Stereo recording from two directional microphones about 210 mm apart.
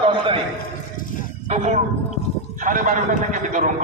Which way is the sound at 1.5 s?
30° right (ahead or behind).